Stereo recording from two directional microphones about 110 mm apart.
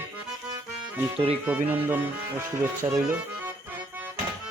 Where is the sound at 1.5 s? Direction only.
15° right (ahead or behind).